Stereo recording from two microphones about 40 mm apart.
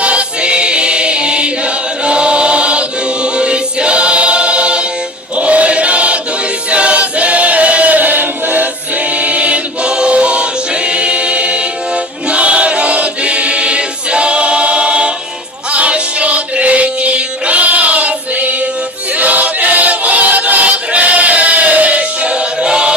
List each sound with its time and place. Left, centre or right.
0.0 s choir: right
2.0 s chant: right
3.3 s choir: right
9.2 s choir: right
15.7 s music: right
19.2 s choir: right
22.6 s music: right